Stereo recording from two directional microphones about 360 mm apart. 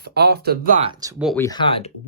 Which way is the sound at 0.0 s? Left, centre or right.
Right.